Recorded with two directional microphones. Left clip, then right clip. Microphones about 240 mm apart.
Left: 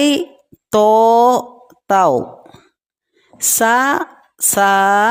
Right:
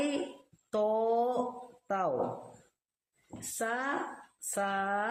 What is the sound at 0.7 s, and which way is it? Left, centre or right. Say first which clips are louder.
Mantra: left 19 dB; left.